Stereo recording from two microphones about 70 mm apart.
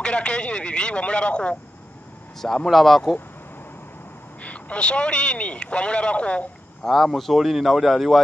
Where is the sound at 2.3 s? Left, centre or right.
Centre.